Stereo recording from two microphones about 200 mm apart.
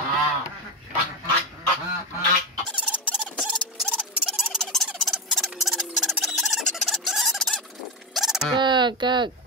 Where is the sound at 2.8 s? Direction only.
5° right (ahead or behind).